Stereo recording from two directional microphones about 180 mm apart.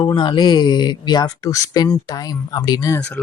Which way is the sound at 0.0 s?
25° left (ahead or behind).